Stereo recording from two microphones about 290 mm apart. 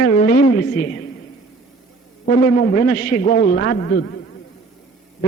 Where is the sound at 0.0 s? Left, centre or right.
Left.